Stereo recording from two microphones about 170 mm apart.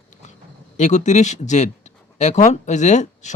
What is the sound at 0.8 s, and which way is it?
Speech, 45° left (ahead or behind).